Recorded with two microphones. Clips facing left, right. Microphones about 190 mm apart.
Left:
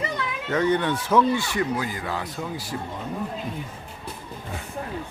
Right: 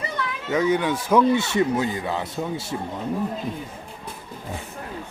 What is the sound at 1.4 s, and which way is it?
Speech, 25° right (ahead or behind).